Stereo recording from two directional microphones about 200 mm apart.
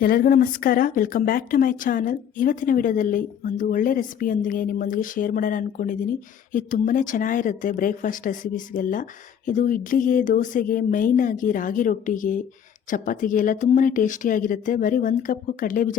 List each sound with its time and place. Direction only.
0.0 s speech: 45° left (ahead or behind)